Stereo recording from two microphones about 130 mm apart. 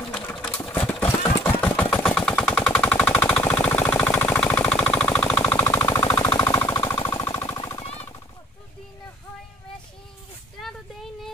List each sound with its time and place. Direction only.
0.1 s sewing machine: 10° left (ahead or behind)
0.7 s engine: 15° left (ahead or behind)
6.4 s a sound: 20° left (ahead or behind)
7.2 s jackhammer: 25° left (ahead or behind)
7.8 s machine gun: 55° left (ahead or behind)